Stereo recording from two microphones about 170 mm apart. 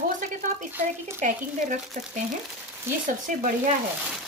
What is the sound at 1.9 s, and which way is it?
Speech, 60° right (ahead or behind).